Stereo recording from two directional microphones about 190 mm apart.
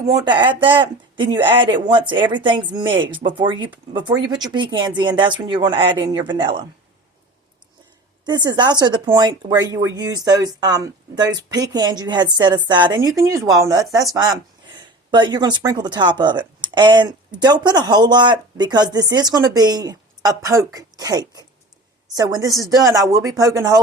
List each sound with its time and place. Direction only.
0.0 s speech: 20° right (ahead or behind)
8.2 s a woman's voice: 20° right (ahead or behind)